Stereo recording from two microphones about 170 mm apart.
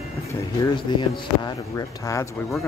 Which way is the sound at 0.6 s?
25° left (ahead or behind).